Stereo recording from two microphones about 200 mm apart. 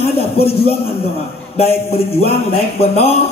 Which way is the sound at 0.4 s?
30° left (ahead or behind).